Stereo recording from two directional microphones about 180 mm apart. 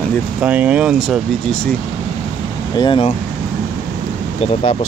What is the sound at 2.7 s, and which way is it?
Speech, 25° left (ahead or behind).